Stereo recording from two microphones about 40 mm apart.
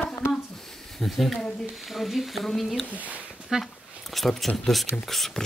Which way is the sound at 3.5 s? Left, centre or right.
Centre.